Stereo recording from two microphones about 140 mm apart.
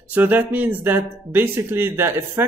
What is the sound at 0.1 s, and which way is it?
Speech, 15° right (ahead or behind).